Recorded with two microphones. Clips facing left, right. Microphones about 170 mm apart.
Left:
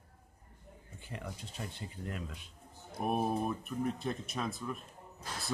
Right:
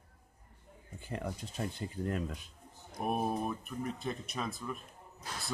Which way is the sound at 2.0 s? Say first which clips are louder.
Right 6 dB; 45° right (ahead or behind).